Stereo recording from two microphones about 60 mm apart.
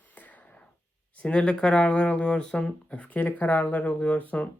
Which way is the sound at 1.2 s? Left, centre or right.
Centre.